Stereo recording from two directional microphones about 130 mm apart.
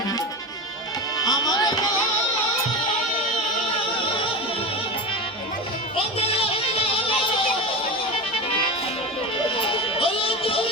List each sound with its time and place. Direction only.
1.2 s music: 30° left (ahead or behind)
6.1 s music: 45° left (ahead or behind)
9.6 s music: 45° left (ahead or behind)